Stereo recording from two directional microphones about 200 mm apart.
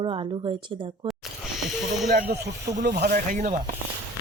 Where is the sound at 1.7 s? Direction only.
Centre (ahead or behind).